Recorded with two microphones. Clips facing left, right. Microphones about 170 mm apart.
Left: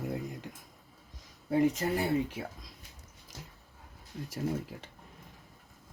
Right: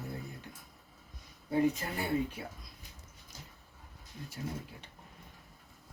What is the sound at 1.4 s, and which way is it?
Speech, 90° left.